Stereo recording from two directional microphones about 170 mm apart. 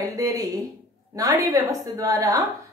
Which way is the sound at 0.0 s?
20° right (ahead or behind).